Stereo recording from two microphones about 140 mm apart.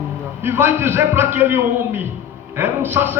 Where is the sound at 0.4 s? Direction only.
15° right (ahead or behind).